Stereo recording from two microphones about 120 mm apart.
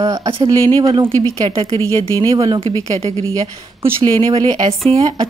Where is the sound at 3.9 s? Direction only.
50° right (ahead or behind).